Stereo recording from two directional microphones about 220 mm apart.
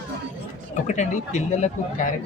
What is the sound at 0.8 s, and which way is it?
Speech, 35° left (ahead or behind).